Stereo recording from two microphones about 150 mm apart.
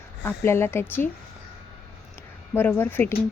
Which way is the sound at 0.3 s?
15° left (ahead or behind).